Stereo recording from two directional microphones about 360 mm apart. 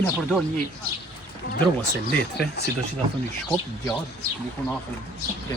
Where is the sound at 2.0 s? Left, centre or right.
Left.